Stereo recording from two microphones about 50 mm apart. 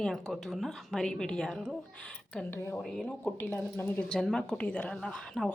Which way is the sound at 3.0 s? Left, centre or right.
Left.